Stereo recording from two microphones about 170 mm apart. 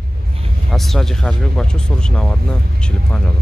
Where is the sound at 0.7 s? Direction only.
Centre (ahead or behind).